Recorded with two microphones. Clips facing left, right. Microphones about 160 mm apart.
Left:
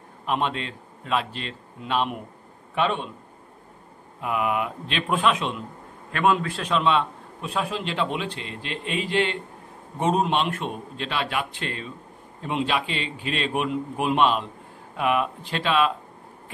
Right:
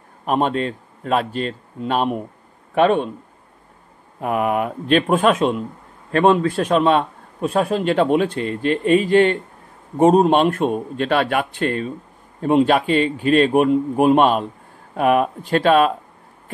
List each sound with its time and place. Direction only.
0.2 s a man's voice: 45° right (ahead or behind)
4.2 s a man's voice: 45° right (ahead or behind)
6.1 s a man's voice: 30° right (ahead or behind)
6.5 s a man's voice: 45° right (ahead or behind)